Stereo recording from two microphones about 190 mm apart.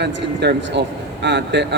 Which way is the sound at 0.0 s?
65° right (ahead or behind).